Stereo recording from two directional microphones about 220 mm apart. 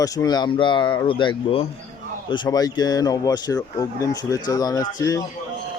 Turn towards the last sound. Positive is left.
turn(degrees=15)  # may be behind; listen again after turning